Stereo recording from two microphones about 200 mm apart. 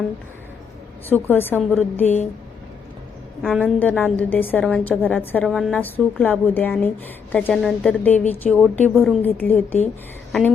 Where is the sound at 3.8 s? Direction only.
10° left (ahead or behind).